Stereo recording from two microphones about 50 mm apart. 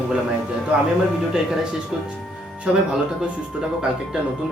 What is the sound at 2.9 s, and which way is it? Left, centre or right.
Speech, centre.